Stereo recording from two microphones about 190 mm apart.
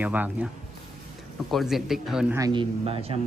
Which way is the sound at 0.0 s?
10° right (ahead or behind).